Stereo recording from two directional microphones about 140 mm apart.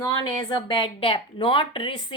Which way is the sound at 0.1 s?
35° left (ahead or behind).